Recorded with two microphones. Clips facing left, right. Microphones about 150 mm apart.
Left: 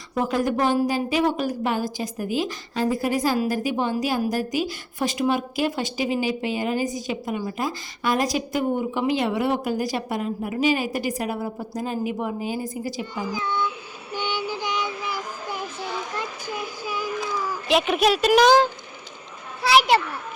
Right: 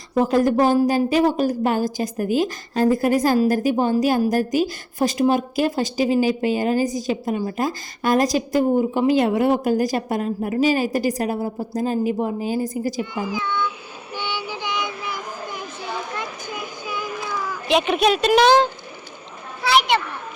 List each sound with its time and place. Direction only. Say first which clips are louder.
0.1 s a woman's voice: right 6 dB; 35° right (ahead or behind)
13.3 s speech: right 1 dB; 40° left (ahead or behind)
14.2 s child singing: left 1 dB; 45° left (ahead or behind)
17.7 s speech: right 2 dB; centre (ahead or behind)